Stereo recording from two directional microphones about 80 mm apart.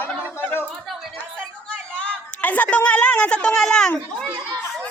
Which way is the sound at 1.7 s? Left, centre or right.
Centre.